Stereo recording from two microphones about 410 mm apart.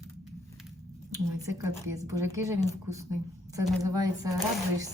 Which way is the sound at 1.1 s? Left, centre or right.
Centre.